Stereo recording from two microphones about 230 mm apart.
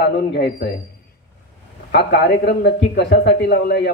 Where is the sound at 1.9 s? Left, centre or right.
Left.